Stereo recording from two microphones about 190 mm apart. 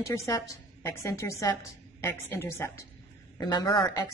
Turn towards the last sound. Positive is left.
turn(degrees=20)  # may be behind; listen again after turning